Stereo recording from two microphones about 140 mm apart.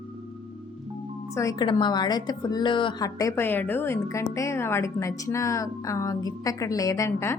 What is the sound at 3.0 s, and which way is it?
A woman's voice, 25° left (ahead or behind).